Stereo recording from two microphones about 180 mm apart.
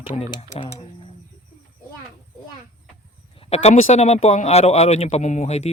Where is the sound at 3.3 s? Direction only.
35° left (ahead or behind).